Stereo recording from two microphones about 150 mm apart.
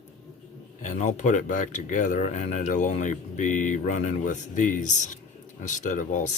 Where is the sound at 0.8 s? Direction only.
50° left (ahead or behind).